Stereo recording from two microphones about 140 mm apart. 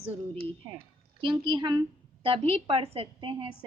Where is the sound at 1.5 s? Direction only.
35° right (ahead or behind).